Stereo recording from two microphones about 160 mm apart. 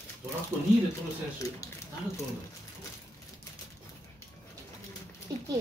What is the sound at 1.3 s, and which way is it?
Speech, 20° left (ahead or behind).